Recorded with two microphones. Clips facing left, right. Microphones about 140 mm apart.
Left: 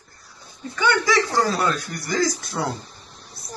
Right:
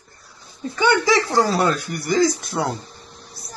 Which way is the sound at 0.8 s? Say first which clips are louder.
Right 3 dB; 25° right (ahead or behind).